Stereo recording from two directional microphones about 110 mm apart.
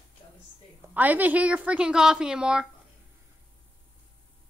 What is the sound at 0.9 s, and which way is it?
A woman's voice, 15° right (ahead or behind).